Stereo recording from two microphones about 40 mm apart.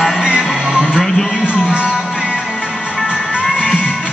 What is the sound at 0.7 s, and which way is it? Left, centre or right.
Music, right.